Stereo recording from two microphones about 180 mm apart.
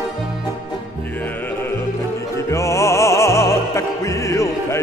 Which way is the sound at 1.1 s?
10° left (ahead or behind).